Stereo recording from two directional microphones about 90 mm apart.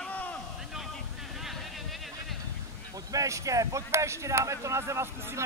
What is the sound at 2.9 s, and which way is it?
Speech, 40° right (ahead or behind).